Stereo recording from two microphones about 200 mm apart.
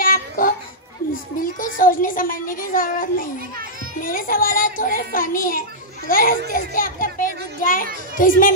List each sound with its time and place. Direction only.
0.0 s babbling: 45° left (ahead or behind)
1.4 s a child's voice: 45° left (ahead or behind)
6.5 s children playing: 45° left (ahead or behind)
8.2 s a child's voice: 45° left (ahead or behind)